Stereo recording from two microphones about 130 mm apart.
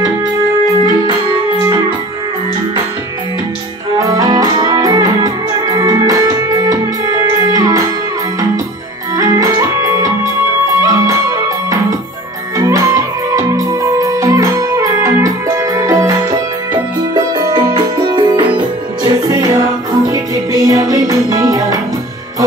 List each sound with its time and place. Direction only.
4.0 s music: 30° right (ahead or behind)
9.1 s music: 25° right (ahead or behind)
20.6 s music: 25° right (ahead or behind)